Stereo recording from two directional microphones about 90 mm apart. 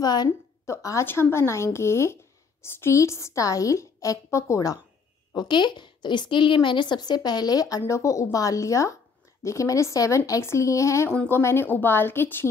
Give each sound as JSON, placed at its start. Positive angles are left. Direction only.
{"t": 0.0, "sound": "a woman's voice", "side_deg": 50}
{"t": 0.7, "sound": "a woman's voice", "side_deg": 35}
{"t": 5.3, "sound": "a woman's voice", "side_deg": 55}
{"t": 11.1, "sound": "a woman's voice", "side_deg": 25}